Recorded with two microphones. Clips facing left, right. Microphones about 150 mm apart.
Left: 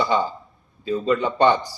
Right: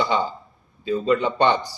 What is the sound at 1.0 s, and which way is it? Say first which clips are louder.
Speech: right 1 dB; 15° right (ahead or behind).